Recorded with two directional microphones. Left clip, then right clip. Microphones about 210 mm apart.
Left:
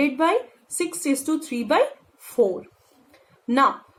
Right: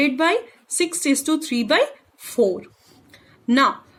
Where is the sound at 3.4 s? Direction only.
55° right (ahead or behind).